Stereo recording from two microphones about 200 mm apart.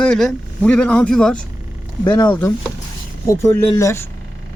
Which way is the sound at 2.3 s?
10° left (ahead or behind).